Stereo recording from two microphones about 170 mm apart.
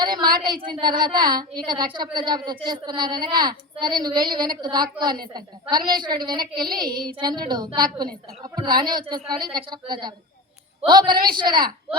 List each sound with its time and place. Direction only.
0.0 s a woman's voice: 25° right (ahead or behind)